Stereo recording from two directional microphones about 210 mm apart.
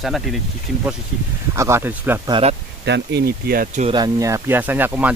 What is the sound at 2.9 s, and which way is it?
Speech, 55° right (ahead or behind).